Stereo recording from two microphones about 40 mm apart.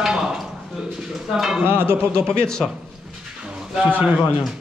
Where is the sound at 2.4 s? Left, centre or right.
Centre.